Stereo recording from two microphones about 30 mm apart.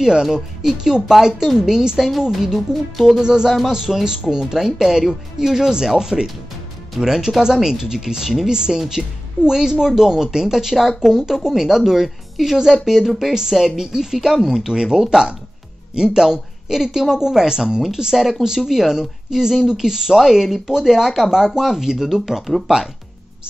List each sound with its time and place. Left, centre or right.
0.0 s speech: centre
2.5 s speech: centre
3.2 s speech: right
3.4 s speech: centre
4.0 s speech: centre
13.0 s speech: centre
13.3 s speech: centre
18.6 s speech: centre